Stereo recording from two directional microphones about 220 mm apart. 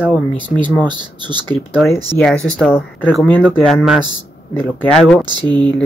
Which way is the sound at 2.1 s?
5° left (ahead or behind).